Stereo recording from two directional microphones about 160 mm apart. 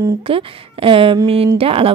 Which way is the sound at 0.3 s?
35° right (ahead or behind).